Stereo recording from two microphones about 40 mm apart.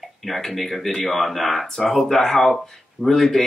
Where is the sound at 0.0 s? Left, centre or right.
Centre.